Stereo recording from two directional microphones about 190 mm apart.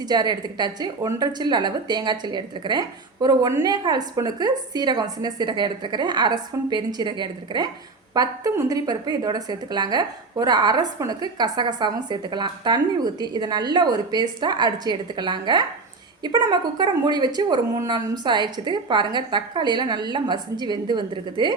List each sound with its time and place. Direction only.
0.0 s a woman's voice: 20° right (ahead or behind)